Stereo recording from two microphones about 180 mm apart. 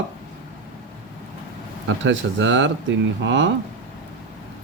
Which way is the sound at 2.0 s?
90° right.